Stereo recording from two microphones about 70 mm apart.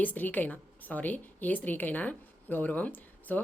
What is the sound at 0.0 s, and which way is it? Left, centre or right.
A woman's voice, left.